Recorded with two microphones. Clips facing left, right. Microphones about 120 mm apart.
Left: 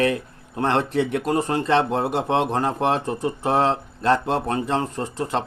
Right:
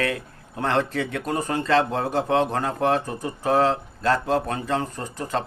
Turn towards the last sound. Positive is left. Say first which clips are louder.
# left 3 dB
turn(degrees=30)  # may be behind; listen again after turning